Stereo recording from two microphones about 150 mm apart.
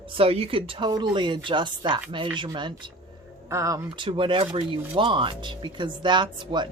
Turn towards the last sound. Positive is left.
turn(degrees=-30)  # may be behind; listen again after turning